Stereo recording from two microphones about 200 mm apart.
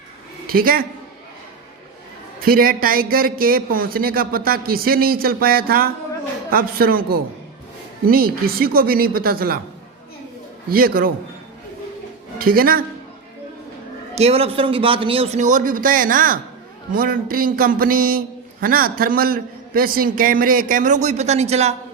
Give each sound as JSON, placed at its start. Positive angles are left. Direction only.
{"t": 0.4, "sound": "a woman's voice", "side_deg": -45}
{"t": 2.4, "sound": "a man's voice", "side_deg": -45}
{"t": 10.7, "sound": "a man's voice", "side_deg": -45}
{"t": 12.4, "sound": "a woman's voice", "side_deg": -45}
{"t": 14.2, "sound": "a man's voice", "side_deg": -30}